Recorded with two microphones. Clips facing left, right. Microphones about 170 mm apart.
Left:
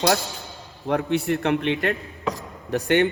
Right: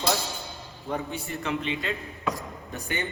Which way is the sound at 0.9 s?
70° left (ahead or behind).